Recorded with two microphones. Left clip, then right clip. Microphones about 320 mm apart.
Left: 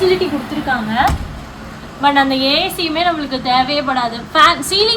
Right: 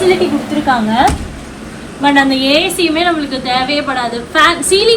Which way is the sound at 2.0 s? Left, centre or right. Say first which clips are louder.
Right 2 dB; left.